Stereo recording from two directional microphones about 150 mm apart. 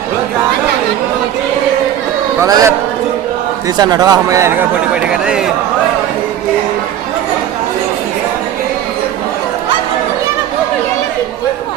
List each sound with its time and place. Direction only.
2.4 s speech: 20° right (ahead or behind)
3.8 s speech: 25° right (ahead or behind)
5.2 s speech: 5° right (ahead or behind)